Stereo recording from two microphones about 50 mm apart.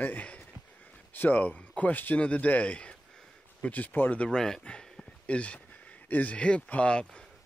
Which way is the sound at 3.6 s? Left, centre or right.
Left.